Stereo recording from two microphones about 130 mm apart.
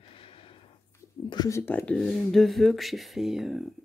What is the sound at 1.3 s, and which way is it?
Speech, 30° left (ahead or behind).